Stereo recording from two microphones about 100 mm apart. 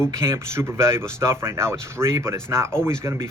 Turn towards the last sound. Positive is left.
turn(degrees=-25)  # may be behind; listen again after turning